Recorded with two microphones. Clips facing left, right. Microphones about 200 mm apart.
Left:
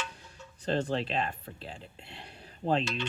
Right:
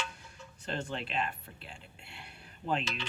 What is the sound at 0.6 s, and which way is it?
Speech, 35° left (ahead or behind).